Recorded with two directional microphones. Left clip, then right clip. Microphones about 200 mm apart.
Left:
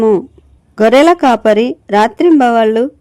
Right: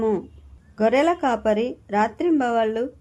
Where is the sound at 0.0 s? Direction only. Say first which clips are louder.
Left 12 dB; 40° left (ahead or behind).